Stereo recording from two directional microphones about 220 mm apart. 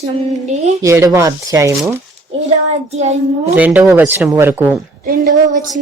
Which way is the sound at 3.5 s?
5° right (ahead or behind).